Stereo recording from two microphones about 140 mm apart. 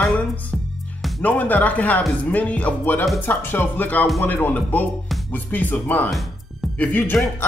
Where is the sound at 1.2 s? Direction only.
10° left (ahead or behind).